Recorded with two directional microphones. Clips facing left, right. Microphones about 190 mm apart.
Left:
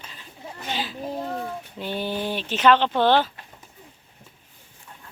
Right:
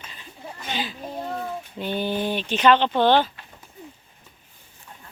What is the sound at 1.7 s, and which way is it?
Speech, 5° left (ahead or behind).